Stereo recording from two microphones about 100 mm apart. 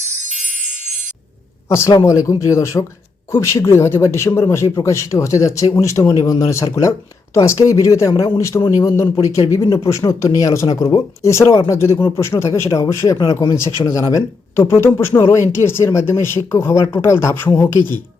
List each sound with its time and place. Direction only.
2.0 s speech: 35° left (ahead or behind)
8.8 s speech: 40° left (ahead or behind)